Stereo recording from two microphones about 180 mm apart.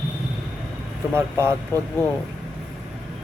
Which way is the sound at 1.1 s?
15° right (ahead or behind).